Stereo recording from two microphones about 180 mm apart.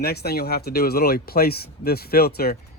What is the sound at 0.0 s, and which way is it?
Speech, 60° left (ahead or behind).